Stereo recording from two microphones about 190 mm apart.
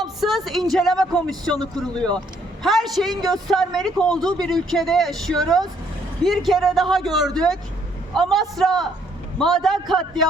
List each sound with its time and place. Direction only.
0.2 s a woman's voice: centre (ahead or behind)